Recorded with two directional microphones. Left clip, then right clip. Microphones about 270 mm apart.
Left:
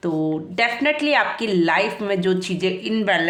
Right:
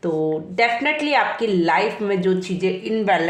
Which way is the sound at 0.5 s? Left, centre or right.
Left.